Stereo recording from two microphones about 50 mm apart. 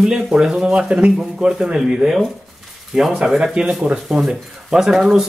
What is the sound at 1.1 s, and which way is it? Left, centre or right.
A man's voice, centre.